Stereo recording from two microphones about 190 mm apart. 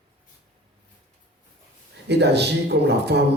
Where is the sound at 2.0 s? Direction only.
60° right (ahead or behind).